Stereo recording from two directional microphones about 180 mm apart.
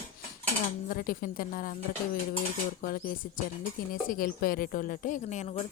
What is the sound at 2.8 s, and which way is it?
Speech, 50° left (ahead or behind).